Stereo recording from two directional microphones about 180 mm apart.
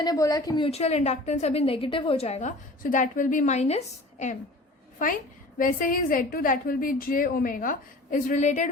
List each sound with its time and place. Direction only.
0.0 s a woman's voice: 20° left (ahead or behind); by 4.4 s 40° left (ahead or behind)
5.5 s a woman's voice: 50° left (ahead or behind)